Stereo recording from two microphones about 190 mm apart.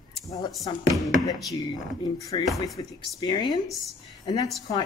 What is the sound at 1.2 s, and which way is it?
A woman's voice, 20° left (ahead or behind).